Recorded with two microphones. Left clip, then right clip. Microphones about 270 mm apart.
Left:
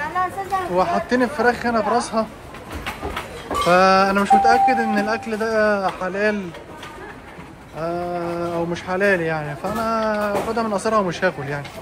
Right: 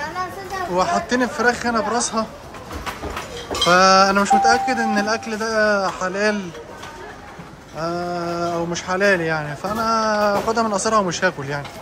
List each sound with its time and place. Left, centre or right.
0.7 s speech: centre
3.6 s speech: centre
7.8 s speech: centre